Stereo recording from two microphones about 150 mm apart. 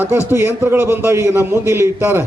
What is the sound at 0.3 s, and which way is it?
A man's voice, 15° right (ahead or behind).